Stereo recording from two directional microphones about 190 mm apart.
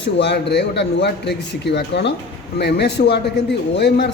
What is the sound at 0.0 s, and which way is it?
A man's voice, 60° left (ahead or behind).